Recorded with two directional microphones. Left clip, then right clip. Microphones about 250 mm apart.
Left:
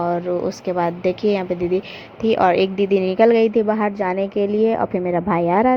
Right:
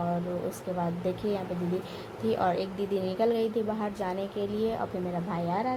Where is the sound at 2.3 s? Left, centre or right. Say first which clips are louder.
Left 12 dB; left.